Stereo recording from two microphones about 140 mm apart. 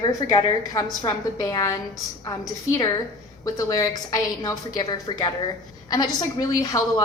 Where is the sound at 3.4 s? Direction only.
25° left (ahead or behind).